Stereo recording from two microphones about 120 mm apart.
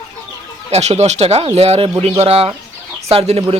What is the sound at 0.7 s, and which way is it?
Speech, 65° right (ahead or behind).